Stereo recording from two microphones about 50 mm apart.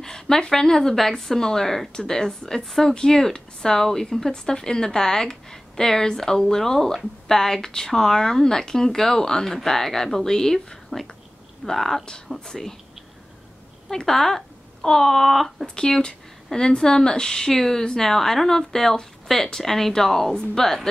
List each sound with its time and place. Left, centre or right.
0.0 s a woman's voice: centre
13.8 s a woman's voice: centre